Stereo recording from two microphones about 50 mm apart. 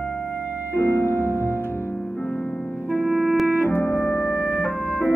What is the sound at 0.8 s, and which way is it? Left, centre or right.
Music, left.